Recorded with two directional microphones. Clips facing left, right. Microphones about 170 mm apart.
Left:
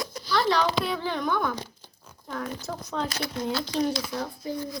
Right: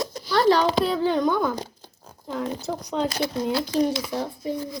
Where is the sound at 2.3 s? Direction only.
25° right (ahead or behind).